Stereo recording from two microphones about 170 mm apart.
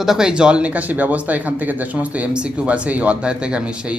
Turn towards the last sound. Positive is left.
turn(degrees=-5)  # may be behind; listen again after turning